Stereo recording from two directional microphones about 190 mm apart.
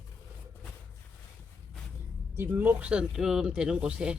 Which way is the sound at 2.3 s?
10° right (ahead or behind).